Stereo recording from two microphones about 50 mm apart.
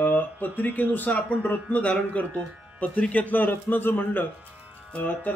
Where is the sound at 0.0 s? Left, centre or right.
Left.